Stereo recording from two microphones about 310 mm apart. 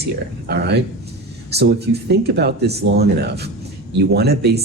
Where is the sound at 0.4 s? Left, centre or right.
Right.